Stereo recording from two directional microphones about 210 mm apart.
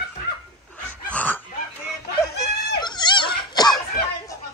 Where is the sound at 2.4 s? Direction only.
15° left (ahead or behind).